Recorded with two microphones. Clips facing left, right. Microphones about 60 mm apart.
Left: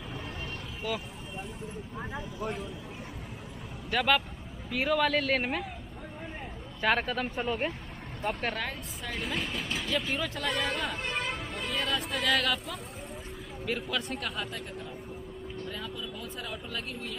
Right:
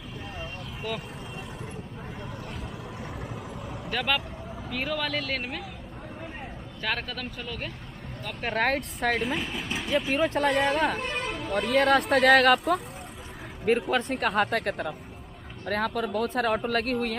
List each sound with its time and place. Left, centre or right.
3.9 s speech: centre
6.8 s speech: centre
7.3 s speech: left
8.5 s speech: right
9.2 s speech: centre
9.7 s speech: centre
10.3 s speech: right
13.7 s speech: right